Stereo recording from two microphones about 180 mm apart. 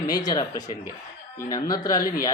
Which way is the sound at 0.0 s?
20° left (ahead or behind).